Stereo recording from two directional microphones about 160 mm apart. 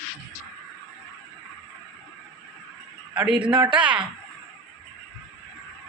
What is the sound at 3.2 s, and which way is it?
Speech, 5° right (ahead or behind).